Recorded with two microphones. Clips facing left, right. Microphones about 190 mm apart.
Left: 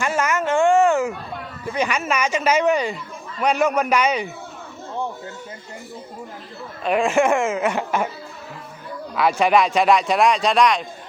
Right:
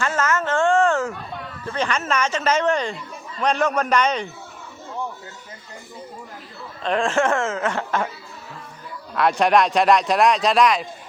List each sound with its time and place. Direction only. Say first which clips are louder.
0.0 s a sound: left 1 dB; 10° left (ahead or behind)
1.6 s speech: left 2 dB; 10° left (ahead or behind)
6.8 s speech: left 2 dB; 10° left (ahead or behind)
9.1 s speech: even; centre (ahead or behind)